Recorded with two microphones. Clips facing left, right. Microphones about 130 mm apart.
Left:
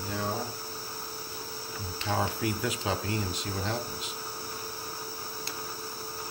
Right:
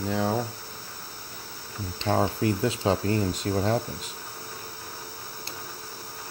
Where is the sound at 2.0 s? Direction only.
35° right (ahead or behind).